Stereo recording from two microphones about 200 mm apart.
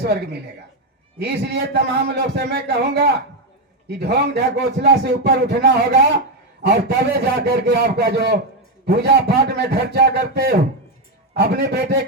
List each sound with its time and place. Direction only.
1.2 s a man's voice: 55° right (ahead or behind)